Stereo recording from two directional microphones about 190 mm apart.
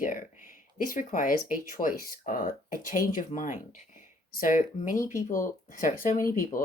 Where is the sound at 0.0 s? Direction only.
45° left (ahead or behind).